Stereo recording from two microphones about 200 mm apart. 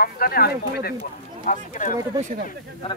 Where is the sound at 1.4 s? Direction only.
40° left (ahead or behind).